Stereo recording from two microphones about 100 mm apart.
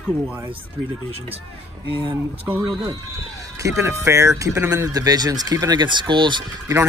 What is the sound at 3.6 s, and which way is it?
Speech, 30° right (ahead or behind).